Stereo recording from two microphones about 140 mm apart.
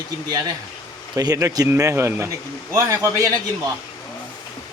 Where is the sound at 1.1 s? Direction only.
25° right (ahead or behind).